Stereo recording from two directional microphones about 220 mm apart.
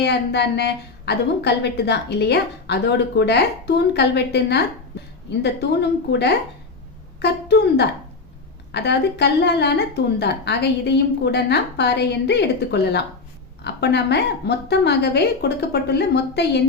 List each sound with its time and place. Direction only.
0.0 s a woman's voice: 50° left (ahead or behind)
6.1 s a woman's voice: 50° left (ahead or behind)